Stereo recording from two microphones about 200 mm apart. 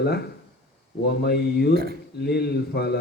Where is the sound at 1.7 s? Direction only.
50° right (ahead or behind).